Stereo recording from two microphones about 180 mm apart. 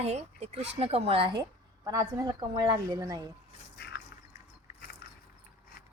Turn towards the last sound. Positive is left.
turn(degrees=35)  # may be behind; listen again after turning